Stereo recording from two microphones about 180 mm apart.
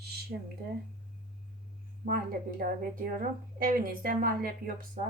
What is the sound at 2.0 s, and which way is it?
A woman's voice, 50° right (ahead or behind).